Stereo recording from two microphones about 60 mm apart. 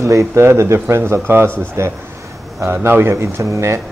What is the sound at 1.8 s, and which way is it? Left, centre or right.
Speech, right.